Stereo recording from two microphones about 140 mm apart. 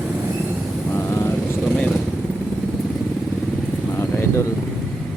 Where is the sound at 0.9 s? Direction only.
15° left (ahead or behind).